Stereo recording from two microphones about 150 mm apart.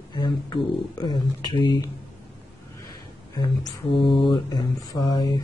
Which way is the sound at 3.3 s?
25° left (ahead or behind).